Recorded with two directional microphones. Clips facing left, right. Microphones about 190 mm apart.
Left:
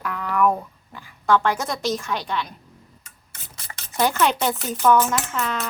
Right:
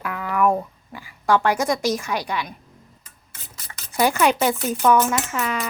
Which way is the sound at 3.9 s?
10° right (ahead or behind).